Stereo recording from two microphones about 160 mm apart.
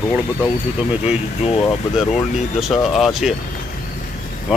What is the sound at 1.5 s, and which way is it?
Speech, 35° left (ahead or behind).